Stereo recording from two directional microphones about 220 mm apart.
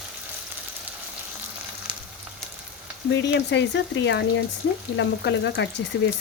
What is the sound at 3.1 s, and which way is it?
Speech, 55° left (ahead or behind).